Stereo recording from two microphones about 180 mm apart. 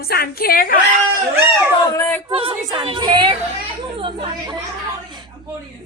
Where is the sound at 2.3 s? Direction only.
30° right (ahead or behind).